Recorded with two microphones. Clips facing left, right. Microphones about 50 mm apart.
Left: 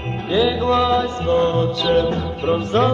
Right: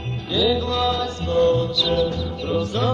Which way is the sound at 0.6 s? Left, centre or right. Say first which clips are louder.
Left 6 dB; left.